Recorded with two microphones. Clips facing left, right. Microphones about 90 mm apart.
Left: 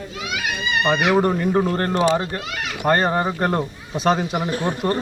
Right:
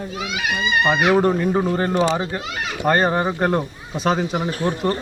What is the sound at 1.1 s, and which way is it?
Speech, centre (ahead or behind).